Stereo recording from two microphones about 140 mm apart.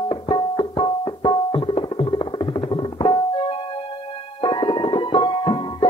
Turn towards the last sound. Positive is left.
turn(degrees=35)  # may be behind; listen again after turning